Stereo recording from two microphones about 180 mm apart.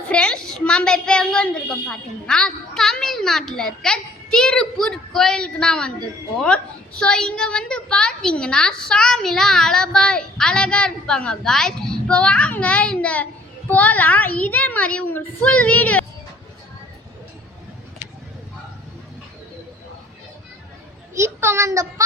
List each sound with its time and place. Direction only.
0.1 s a woman's voice: 5° left (ahead or behind)
21.2 s a child's voice: 15° right (ahead or behind)